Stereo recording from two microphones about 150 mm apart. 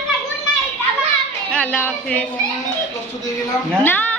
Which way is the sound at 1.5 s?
10° left (ahead or behind).